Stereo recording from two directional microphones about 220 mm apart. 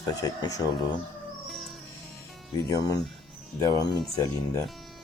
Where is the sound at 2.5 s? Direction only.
20° left (ahead or behind).